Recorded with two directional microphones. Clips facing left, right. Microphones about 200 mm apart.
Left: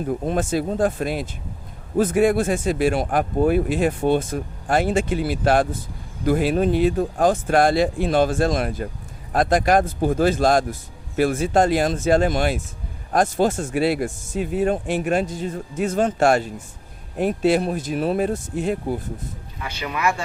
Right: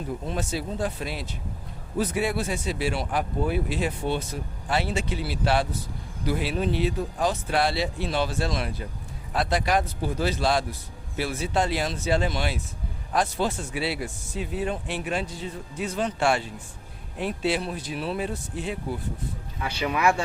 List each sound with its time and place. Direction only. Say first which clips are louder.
0.1 s speech: left 8 dB; 50° left (ahead or behind)